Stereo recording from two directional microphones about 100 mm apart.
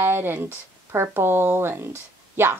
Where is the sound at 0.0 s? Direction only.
25° right (ahead or behind).